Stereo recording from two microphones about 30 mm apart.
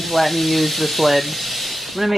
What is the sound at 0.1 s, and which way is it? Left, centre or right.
A woman's voice, centre.